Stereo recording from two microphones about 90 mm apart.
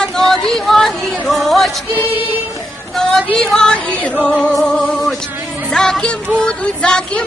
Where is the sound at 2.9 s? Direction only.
5° left (ahead or behind).